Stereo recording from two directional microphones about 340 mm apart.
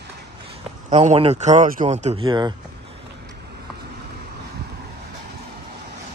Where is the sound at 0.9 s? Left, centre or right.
Centre.